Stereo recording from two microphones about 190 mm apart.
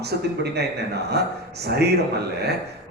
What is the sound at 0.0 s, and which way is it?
Speech, 60° right (ahead or behind).